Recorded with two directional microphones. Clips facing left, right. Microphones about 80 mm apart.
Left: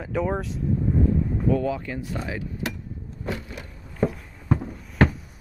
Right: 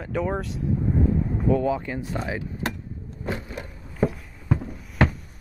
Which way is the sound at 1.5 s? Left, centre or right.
Right.